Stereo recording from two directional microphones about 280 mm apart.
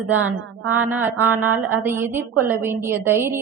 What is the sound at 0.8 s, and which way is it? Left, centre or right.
A woman's voice, centre.